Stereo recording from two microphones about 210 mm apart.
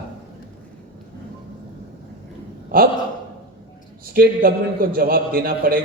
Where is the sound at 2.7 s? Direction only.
45° right (ahead or behind).